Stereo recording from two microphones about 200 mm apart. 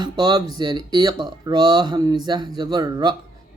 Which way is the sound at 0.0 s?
20° right (ahead or behind).